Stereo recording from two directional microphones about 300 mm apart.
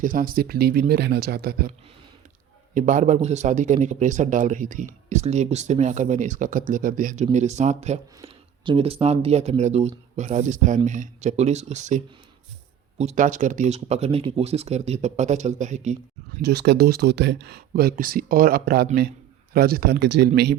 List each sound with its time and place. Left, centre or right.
0.0 s speech: right
2.7 s speech: right
16.4 s speech: right